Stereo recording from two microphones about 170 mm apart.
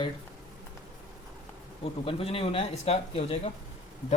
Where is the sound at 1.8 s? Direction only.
35° left (ahead or behind).